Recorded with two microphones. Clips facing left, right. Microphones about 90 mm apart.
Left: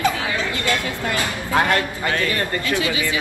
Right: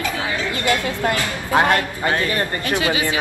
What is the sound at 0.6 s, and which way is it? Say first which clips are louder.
Speech: right 3 dB; 25° right (ahead or behind).